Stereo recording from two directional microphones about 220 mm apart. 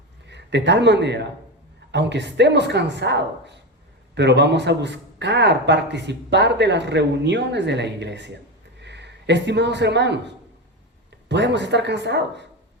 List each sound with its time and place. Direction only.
0.3 s a man's voice: 50° right (ahead or behind)